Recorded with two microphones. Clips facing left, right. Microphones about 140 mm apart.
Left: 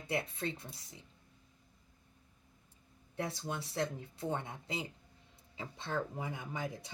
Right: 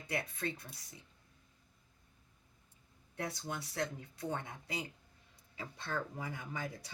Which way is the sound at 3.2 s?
25° left (ahead or behind).